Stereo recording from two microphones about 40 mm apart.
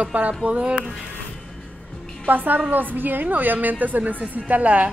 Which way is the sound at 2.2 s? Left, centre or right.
Right.